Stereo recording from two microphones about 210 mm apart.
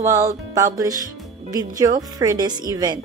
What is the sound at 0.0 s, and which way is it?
A woman's voice, 15° right (ahead or behind).